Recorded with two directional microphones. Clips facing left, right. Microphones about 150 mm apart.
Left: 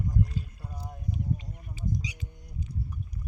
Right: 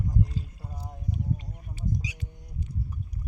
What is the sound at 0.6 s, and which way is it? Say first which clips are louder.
Rowboat: even; 25° right (ahead or behind).